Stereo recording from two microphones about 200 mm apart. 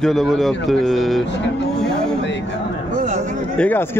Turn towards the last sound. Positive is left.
turn(degrees=10)  # may be behind; listen again after turning